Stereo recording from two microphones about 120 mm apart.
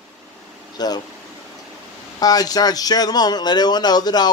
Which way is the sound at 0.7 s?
35° left (ahead or behind).